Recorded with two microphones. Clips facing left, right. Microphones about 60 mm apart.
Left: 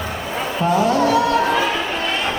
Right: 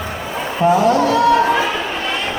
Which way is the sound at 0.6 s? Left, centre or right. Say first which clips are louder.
Right 3 dB; centre.